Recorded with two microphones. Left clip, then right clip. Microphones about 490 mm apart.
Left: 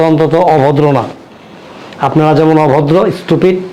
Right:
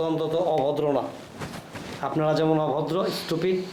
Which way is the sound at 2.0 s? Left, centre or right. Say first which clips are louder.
Left 15 dB; left.